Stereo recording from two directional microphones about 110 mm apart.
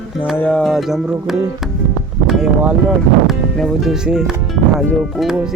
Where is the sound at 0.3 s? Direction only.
10° left (ahead or behind).